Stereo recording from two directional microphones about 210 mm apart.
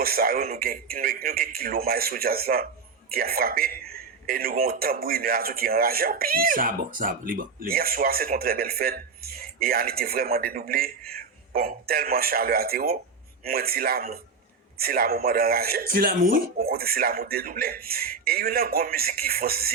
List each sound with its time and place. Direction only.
0.0 s a man's voice: 45° right (ahead or behind)